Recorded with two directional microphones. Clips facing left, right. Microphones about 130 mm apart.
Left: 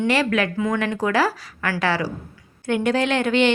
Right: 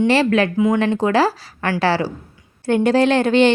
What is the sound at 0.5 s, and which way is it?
A woman's voice, 15° right (ahead or behind).